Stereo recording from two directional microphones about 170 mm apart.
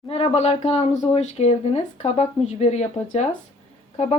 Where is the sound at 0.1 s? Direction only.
35° left (ahead or behind).